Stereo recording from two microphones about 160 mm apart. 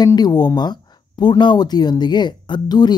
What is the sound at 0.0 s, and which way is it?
Speech, 25° left (ahead or behind).